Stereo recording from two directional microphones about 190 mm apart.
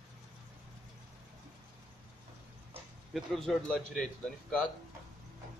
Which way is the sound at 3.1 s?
Centre (ahead or behind).